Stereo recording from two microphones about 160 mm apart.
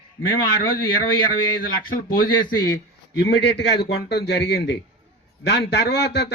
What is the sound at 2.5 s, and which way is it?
Speech, 25° left (ahead or behind).